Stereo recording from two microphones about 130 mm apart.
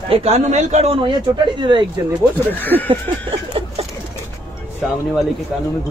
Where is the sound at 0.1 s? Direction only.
55° right (ahead or behind).